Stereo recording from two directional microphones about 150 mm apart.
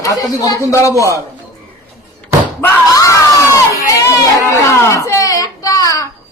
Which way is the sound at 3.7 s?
20° left (ahead or behind).